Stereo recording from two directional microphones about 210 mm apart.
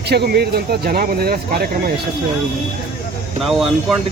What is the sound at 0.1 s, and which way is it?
Speech, 50° right (ahead or behind).